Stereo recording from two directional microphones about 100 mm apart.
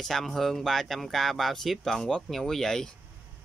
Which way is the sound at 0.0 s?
5° left (ahead or behind).